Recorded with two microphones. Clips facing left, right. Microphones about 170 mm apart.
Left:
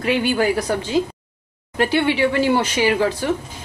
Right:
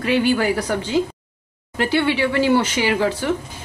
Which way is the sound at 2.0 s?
15° left (ahead or behind).